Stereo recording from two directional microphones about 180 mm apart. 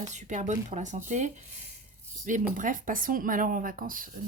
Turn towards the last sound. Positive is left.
turn(degrees=-50)  # may be behind; listen again after turning